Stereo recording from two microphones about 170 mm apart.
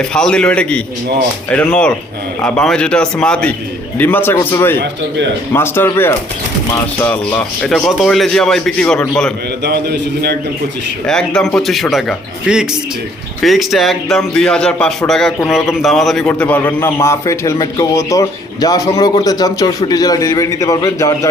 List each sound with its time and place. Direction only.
0.1 s a man's voice: 5° left (ahead or behind)
4.8 s speech: 90° right
5.5 s a man's voice: 15° left (ahead or behind)
7.6 s a man's voice: centre (ahead or behind)
9.6 s a man's voice: 70° right (ahead or behind)
11.0 s a man's voice: 5° left (ahead or behind)